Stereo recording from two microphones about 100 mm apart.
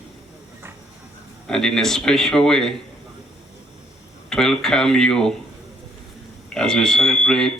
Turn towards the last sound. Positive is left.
turn(degrees=5)  # may be behind; listen again after turning